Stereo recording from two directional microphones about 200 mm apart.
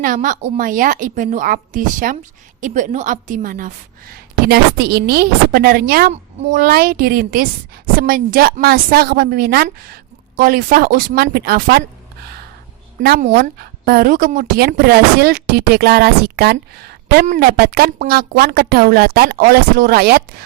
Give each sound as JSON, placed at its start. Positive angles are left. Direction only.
{"t": 0.0, "sound": "a woman's voice", "side_deg": -40}
{"t": 13.0, "sound": "a woman's voice", "side_deg": -45}